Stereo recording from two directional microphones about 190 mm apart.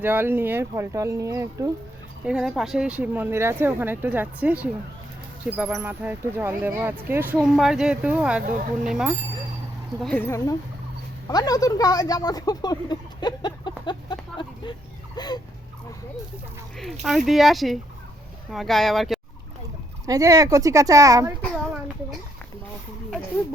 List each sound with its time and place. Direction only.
0.0 s speech: 10° right (ahead or behind)
2.2 s speech: 5° right (ahead or behind); by 15.4 s 20° left (ahead or behind)
16.7 s speech: centre (ahead or behind)
20.1 s speech: 20° right (ahead or behind)